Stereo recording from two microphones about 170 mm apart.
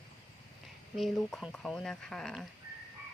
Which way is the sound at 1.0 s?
Centre (ahead or behind).